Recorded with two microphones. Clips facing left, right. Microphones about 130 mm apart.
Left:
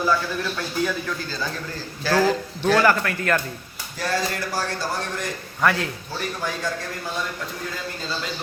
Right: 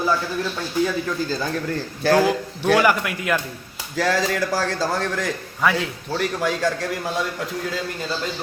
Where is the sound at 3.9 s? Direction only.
90° right.